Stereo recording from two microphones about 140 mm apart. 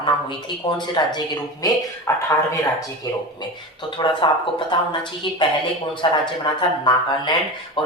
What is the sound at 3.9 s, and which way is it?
Speech, 35° left (ahead or behind).